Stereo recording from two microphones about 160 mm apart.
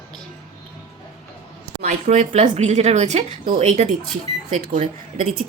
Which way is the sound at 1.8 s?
50° right (ahead or behind).